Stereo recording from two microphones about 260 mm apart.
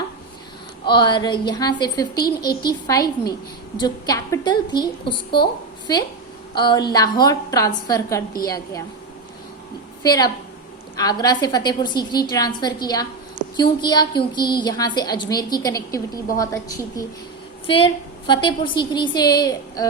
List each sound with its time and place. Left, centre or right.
0.9 s a woman's voice: centre
6.5 s a woman's voice: centre
10.0 s a woman's voice: centre